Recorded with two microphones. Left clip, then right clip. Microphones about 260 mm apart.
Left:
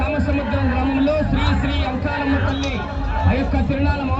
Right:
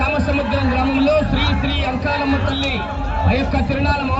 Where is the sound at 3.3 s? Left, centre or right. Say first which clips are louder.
Right 3 dB; right.